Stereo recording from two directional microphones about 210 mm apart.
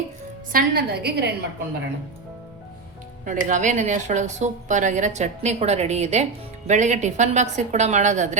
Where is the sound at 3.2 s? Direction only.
35° right (ahead or behind).